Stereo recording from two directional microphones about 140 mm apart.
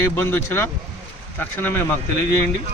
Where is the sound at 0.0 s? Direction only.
20° left (ahead or behind).